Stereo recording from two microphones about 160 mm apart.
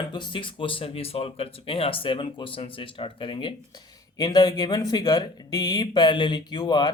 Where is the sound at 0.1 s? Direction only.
30° left (ahead or behind).